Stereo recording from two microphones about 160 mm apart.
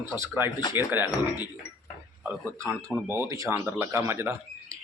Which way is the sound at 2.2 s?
15° right (ahead or behind).